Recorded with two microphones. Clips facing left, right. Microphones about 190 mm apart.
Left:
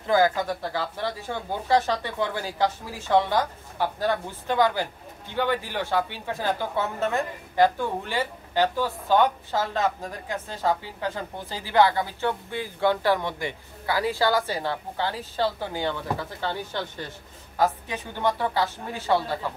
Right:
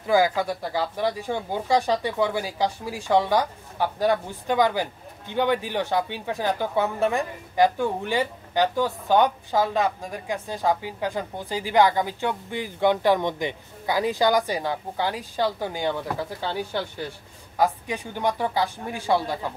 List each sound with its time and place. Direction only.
0.0 s a woman's voice: 10° right (ahead or behind)